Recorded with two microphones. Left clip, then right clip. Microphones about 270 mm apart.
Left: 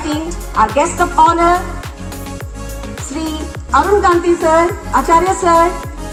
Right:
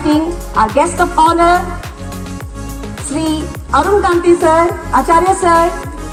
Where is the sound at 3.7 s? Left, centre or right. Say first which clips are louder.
Even; right.